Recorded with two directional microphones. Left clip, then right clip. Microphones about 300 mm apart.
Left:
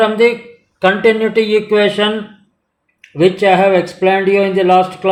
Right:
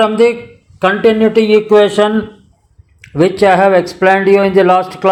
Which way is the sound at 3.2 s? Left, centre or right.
Right.